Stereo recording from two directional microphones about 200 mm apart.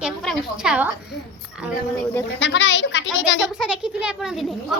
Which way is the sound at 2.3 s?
65° left (ahead or behind).